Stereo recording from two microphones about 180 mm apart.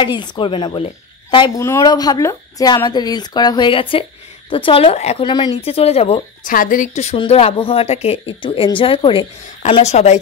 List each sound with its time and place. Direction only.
0.0 s a woman's voice: 25° left (ahead or behind)
5.3 s a woman's voice: 25° left (ahead or behind)
6.4 s a woman's voice: 50° left (ahead or behind)